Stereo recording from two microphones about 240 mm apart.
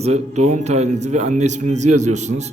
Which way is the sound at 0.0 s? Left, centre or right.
Right.